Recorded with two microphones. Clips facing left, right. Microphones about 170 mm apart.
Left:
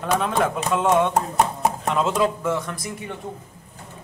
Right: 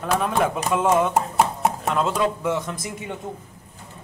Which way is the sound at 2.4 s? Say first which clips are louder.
Even; 20° right (ahead or behind).